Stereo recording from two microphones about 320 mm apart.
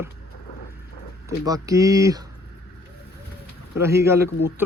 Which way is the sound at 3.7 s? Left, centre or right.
Centre.